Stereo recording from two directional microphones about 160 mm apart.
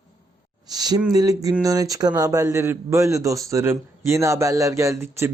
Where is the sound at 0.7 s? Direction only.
25° right (ahead or behind).